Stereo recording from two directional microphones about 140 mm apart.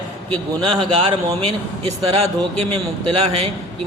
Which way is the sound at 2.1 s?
50° right (ahead or behind).